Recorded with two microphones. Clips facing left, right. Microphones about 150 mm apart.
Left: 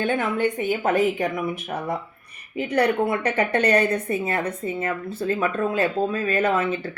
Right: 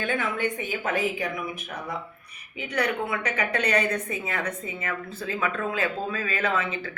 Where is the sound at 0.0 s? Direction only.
50° left (ahead or behind).